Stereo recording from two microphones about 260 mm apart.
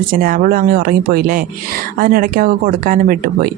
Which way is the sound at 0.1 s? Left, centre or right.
Right.